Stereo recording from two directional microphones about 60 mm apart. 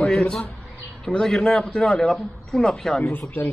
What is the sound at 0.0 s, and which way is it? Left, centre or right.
A man's voice, centre.